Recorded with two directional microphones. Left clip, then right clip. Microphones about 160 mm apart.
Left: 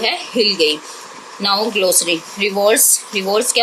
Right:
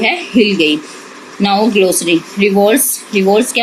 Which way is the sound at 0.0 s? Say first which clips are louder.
Right 4 dB; 50° left (ahead or behind).